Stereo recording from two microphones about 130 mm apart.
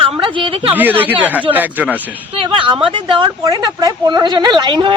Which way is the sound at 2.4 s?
40° right (ahead or behind).